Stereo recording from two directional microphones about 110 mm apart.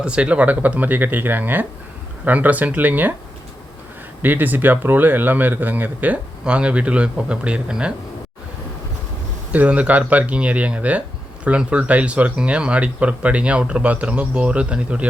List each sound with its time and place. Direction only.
0.0 s a man's voice: 10° right (ahead or behind)
4.2 s a man's voice: 15° right (ahead or behind)
9.5 s a man's voice: 15° right (ahead or behind)